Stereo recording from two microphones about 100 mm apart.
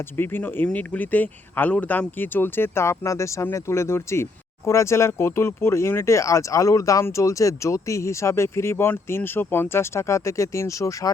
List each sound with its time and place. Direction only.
0.2 s speech: 20° left (ahead or behind)